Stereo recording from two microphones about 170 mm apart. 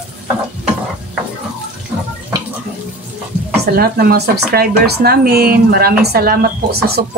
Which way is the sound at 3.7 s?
60° right (ahead or behind).